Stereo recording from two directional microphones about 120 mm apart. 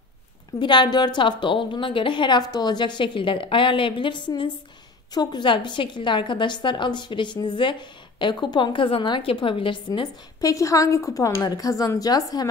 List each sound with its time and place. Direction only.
0.6 s a woman's voice: 40° left (ahead or behind)
10.4 s a woman's voice: 25° left (ahead or behind)